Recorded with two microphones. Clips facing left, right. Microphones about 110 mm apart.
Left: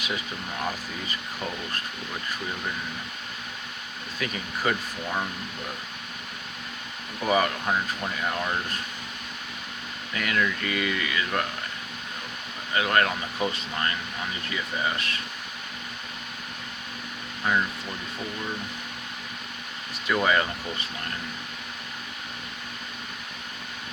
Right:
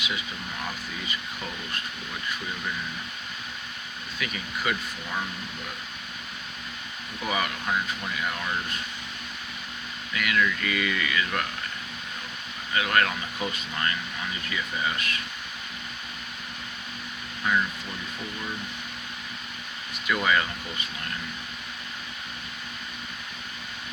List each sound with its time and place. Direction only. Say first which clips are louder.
1.0 s speech: left 3 dB; 30° left (ahead or behind)
4.2 s speech: left 3 dB; 35° left (ahead or behind)
7.3 s speech: left 5 dB; 35° left (ahead or behind)
10.2 s speech: right 1 dB; 35° left (ahead or behind)
12.7 s speech: left 1 dB; 30° left (ahead or behind)
20.1 s speech: left 2 dB; 30° left (ahead or behind)